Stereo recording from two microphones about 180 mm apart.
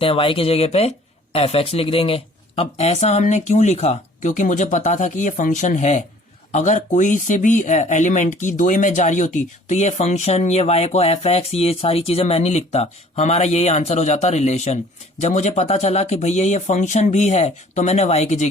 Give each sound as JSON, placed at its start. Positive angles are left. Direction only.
{"t": 0.0, "sound": "speech", "side_deg": 30}